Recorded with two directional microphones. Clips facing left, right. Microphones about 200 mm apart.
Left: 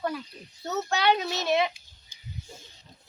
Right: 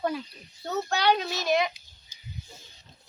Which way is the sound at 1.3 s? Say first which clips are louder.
Even; 30° left (ahead or behind).